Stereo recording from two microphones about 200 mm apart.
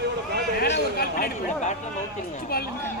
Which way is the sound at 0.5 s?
55° left (ahead or behind).